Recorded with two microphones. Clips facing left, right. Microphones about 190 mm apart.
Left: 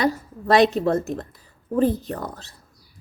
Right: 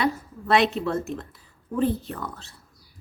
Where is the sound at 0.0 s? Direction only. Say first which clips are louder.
Left 3 dB; 40° left (ahead or behind).